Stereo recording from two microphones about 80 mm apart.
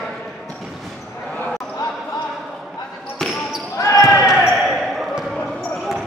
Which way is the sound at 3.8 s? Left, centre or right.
Left.